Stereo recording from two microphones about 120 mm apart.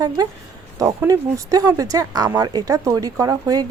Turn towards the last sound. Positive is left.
turn(degrees=-30)  # may be behind; listen again after turning